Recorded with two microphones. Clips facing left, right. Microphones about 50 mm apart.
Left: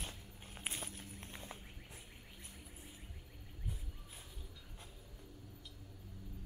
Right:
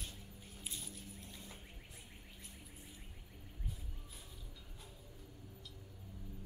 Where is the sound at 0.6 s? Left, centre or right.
Left.